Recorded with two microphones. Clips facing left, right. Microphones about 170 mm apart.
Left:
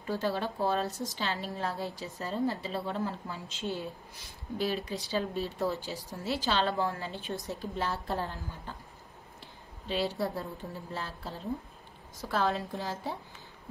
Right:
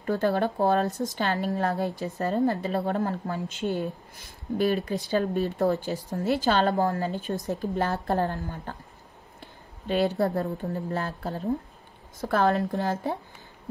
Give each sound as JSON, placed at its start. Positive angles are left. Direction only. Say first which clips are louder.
{"t": 0.0, "sound": "a woman's voice", "louder": "right 7 dB", "side_deg": -55}